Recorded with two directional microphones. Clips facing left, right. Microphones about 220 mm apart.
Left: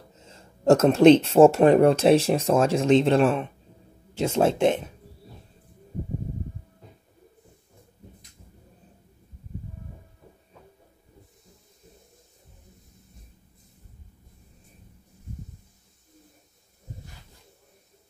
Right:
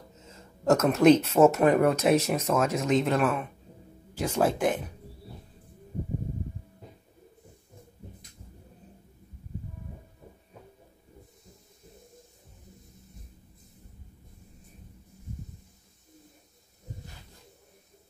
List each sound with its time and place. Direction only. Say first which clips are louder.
0.2 s speech: left 6 dB; 30° left (ahead or behind)